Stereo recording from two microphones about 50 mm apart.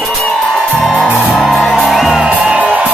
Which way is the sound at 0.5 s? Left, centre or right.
Centre.